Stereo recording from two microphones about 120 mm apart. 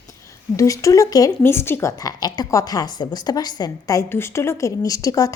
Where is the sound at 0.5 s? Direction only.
25° left (ahead or behind).